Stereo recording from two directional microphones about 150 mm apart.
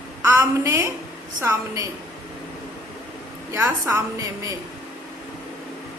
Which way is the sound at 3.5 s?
15° right (ahead or behind).